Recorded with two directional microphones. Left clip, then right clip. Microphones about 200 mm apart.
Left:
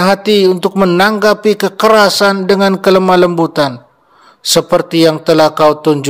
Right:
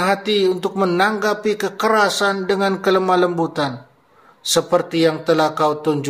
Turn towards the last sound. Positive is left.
turn(degrees=45)  # may be behind; listen again after turning